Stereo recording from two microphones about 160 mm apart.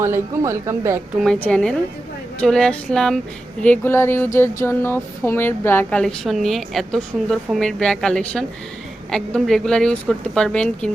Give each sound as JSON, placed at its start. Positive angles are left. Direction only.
{"t": 0.0, "sound": "speech", "side_deg": -15}
{"t": 1.2, "sound": "a woman's voice", "side_deg": 5}